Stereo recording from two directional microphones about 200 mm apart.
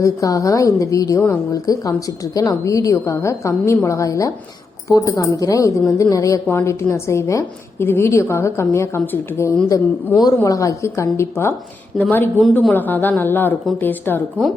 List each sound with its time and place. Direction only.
0.0 s a woman's voice: 15° left (ahead or behind)